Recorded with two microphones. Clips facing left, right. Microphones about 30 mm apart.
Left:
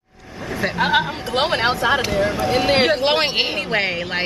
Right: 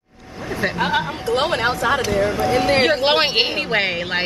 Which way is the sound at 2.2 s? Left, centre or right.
Centre.